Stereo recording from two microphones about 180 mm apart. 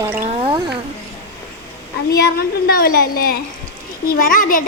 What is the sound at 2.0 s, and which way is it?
A child's voice, 60° left (ahead or behind).